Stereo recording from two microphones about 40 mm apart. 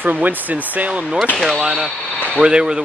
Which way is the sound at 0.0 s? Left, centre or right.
Right.